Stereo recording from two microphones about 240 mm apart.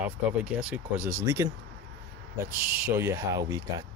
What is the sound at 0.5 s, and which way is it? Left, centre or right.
Speech, centre.